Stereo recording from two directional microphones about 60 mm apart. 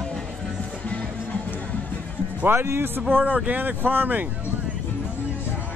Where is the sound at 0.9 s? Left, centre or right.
Left.